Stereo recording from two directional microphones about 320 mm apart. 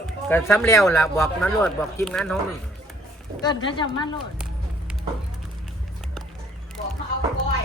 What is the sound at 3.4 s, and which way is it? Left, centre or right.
Speech, centre.